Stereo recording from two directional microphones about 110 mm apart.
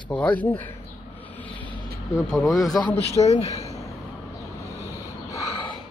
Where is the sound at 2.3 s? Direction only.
Centre (ahead or behind).